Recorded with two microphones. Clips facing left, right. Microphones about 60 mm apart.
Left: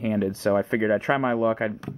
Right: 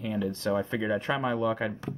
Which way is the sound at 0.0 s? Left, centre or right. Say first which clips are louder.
Left 6 dB; left.